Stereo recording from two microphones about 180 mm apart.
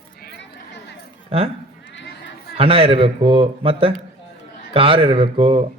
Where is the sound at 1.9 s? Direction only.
80° left.